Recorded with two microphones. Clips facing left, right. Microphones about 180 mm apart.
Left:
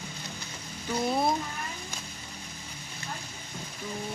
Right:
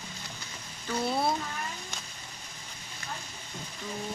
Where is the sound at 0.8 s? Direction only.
15° left (ahead or behind).